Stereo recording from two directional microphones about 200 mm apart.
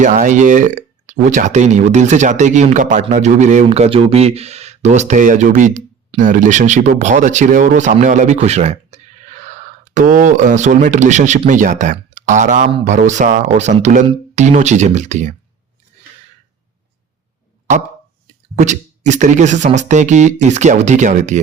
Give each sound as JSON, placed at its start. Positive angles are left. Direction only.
{"t": 0.0, "sound": "speech", "side_deg": -40}
{"t": 18.5, "sound": "speech", "side_deg": -35}